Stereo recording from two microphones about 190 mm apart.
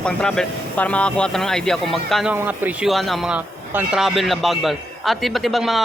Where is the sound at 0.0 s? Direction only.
5° left (ahead or behind).